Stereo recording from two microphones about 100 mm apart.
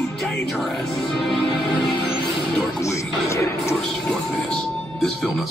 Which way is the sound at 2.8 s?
30° left (ahead or behind).